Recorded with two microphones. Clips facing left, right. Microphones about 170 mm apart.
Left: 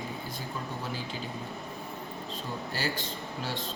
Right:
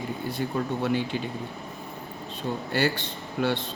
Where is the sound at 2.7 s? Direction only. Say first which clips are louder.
Right 9 dB; 65° right (ahead or behind).